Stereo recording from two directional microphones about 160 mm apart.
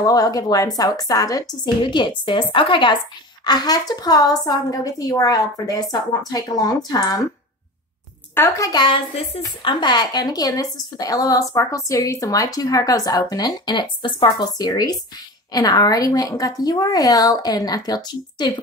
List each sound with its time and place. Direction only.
0.0 s a woman's voice: 20° left (ahead or behind)
8.4 s a woman's voice: 20° left (ahead or behind)